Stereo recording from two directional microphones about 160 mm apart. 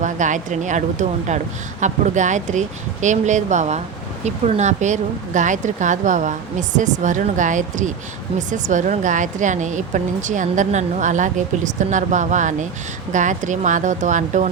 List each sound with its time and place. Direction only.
0.0 s speech: 50° right (ahead or behind)